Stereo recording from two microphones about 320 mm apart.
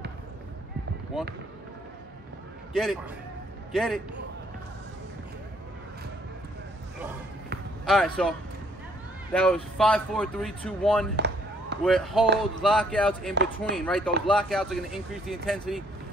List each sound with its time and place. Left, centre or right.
2.7 s a man's voice: centre
7.8 s speech: centre
11.1 s a sound: right
11.8 s speech: centre
13.3 s speech: right
13.7 s speech: centre